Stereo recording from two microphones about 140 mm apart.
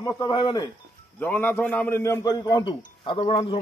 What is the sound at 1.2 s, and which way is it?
A man's voice, 15° left (ahead or behind).